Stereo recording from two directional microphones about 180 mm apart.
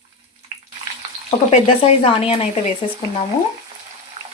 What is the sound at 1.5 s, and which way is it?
Speech, 30° left (ahead or behind).